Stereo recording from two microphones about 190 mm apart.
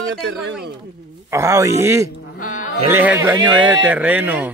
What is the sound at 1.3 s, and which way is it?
Speech, 15° right (ahead or behind).